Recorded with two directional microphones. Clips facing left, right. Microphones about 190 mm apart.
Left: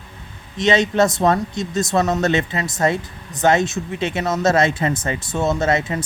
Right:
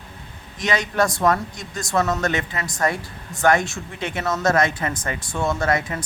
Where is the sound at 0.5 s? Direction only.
25° left (ahead or behind).